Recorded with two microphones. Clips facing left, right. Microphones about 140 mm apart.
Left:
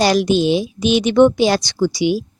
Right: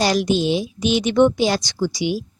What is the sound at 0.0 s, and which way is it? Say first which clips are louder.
A woman's voice: left 4 dB; 75° left (ahead or behind).